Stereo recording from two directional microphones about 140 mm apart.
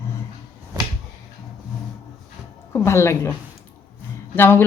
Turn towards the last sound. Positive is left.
turn(degrees=15)  # may be behind; listen again after turning